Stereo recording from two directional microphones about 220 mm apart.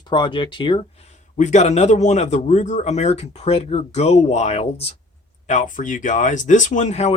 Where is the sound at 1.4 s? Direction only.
30° left (ahead or behind).